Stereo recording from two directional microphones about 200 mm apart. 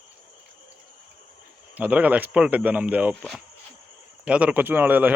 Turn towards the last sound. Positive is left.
turn(degrees=-10)  # may be behind; listen again after turning